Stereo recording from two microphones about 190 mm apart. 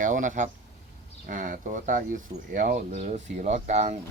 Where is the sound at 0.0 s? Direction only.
40° right (ahead or behind).